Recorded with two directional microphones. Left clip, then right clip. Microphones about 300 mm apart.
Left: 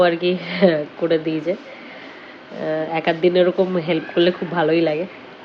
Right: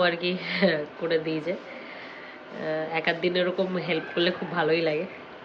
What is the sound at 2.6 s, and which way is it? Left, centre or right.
Speech, centre.